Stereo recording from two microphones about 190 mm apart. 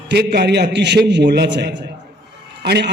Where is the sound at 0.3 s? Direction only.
60° right (ahead or behind).